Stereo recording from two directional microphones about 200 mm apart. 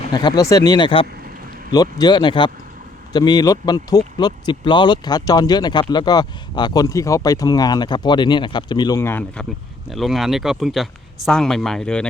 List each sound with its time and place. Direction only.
0.1 s speech: 20° left (ahead or behind); by 12.0 s 5° left (ahead or behind)